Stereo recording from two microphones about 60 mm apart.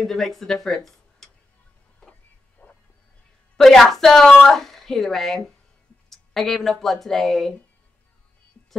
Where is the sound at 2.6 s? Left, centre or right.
Left.